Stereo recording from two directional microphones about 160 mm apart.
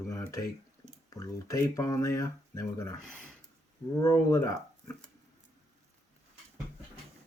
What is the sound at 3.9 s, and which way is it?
Speech, 20° left (ahead or behind).